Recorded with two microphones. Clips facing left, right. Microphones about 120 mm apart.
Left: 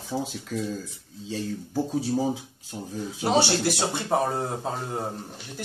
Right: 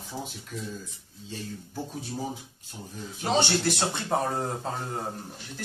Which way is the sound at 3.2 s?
10° left (ahead or behind).